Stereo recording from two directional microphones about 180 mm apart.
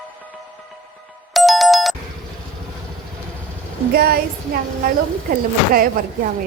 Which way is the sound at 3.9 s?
55° right (ahead or behind).